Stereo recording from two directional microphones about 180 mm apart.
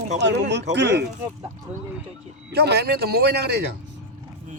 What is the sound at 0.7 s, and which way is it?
Speech, 75° right (ahead or behind).